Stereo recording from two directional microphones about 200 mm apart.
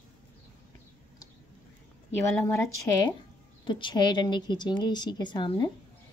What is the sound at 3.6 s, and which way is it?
A woman's voice, 25° left (ahead or behind).